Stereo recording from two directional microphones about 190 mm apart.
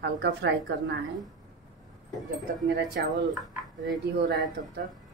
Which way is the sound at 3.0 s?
60° right (ahead or behind).